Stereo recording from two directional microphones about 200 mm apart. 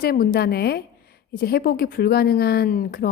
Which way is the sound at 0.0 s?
50° left (ahead or behind).